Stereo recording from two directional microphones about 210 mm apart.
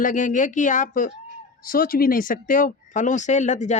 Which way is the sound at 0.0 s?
35° left (ahead or behind).